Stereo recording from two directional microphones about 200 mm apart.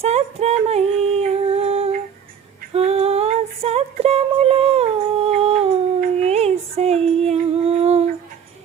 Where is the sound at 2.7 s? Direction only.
30° right (ahead or behind).